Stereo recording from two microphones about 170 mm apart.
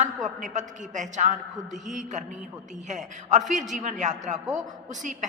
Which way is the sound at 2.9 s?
45° right (ahead or behind).